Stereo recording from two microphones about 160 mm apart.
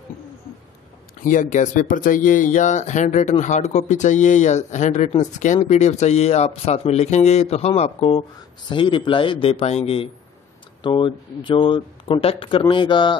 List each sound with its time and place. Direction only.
1.2 s speech: 55° left (ahead or behind); by 13.2 s 30° left (ahead or behind)